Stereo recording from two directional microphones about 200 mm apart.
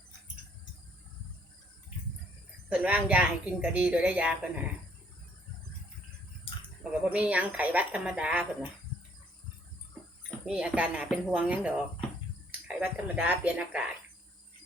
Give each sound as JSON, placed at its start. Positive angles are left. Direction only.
{"t": 2.6, "sound": "a woman's voice", "side_deg": -5}
{"t": 6.5, "sound": "a sound", "side_deg": 30}
{"t": 7.0, "sound": "a woman's voice", "side_deg": -5}
{"t": 10.4, "sound": "speech", "side_deg": -5}